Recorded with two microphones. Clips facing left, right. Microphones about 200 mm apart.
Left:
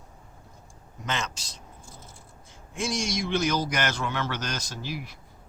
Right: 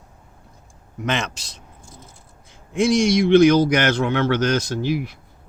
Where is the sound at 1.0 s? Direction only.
65° right (ahead or behind).